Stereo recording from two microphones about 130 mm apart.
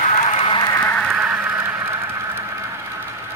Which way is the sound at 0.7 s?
15° left (ahead or behind).